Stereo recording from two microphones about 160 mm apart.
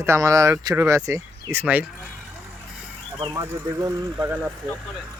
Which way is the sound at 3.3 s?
20° right (ahead or behind).